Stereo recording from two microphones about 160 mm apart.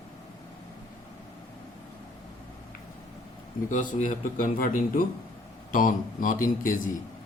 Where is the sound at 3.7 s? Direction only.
50° left (ahead or behind).